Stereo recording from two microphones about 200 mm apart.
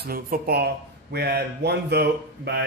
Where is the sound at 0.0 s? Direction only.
50° right (ahead or behind).